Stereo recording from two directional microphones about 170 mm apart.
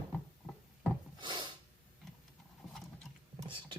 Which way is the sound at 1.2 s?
25° right (ahead or behind).